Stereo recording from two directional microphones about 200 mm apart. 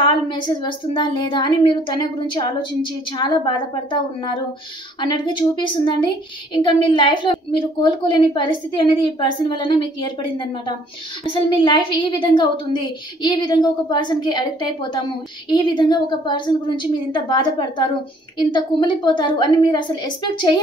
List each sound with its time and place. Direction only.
0.0 s a woman's voice: 25° left (ahead or behind)